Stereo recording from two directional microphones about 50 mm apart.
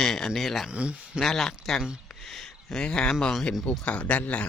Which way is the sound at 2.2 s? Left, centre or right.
Centre.